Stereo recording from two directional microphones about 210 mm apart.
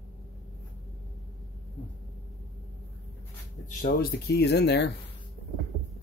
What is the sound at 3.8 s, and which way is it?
Speech, 50° left (ahead or behind).